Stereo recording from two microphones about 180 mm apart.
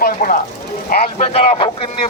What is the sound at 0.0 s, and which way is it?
Speech, 50° left (ahead or behind).